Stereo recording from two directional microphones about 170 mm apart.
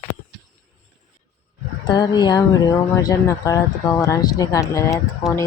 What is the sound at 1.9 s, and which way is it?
Speech, 25° left (ahead or behind).